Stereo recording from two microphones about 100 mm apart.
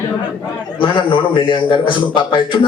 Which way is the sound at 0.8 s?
55° left (ahead or behind).